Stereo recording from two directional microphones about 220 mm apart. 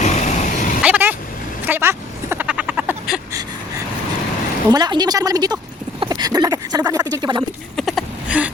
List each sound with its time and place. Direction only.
0.0 s vehicle: 35° left (ahead or behind)
0.8 s vehicle: 5° right (ahead or behind)
1.6 s frog: 10° right (ahead or behind)
4.7 s a woman's voice: 20° right (ahead or behind)
6.0 s a sound: 20° right (ahead or behind)
7.8 s a sound: centre (ahead or behind)